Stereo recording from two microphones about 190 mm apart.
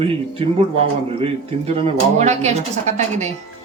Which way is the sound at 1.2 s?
30° right (ahead or behind).